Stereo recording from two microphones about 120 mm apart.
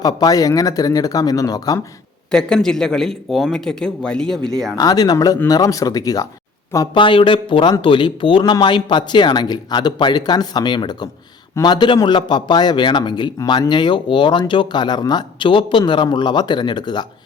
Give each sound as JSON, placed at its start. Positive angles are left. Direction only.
{"t": 0.0, "sound": "speech", "side_deg": 30}
{"t": 2.3, "sound": "speech", "side_deg": 5}
{"t": 4.8, "sound": "speech", "side_deg": 30}
{"t": 6.9, "sound": "speech", "side_deg": 45}